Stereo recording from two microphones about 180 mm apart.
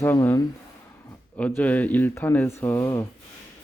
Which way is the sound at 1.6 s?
10° left (ahead or behind).